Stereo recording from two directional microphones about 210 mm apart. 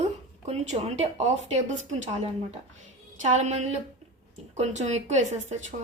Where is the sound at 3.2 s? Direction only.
35° right (ahead or behind).